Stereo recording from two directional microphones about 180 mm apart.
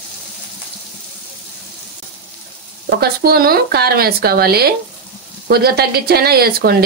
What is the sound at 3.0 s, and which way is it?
Speech, 60° right (ahead or behind).